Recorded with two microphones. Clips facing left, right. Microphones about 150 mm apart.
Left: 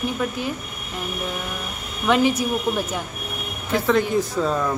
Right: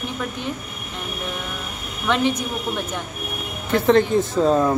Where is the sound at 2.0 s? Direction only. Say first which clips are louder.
Left 2 dB; 5° left (ahead or behind).